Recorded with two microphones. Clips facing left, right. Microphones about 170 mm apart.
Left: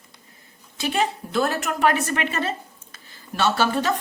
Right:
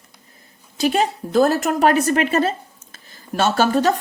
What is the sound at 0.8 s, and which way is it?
A woman's voice, 40° right (ahead or behind).